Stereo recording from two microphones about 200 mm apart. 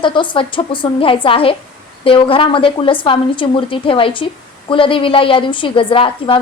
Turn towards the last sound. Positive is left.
turn(degrees=25)  # may be behind; listen again after turning